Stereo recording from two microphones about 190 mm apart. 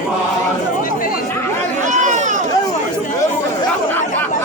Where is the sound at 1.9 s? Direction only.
40° right (ahead or behind).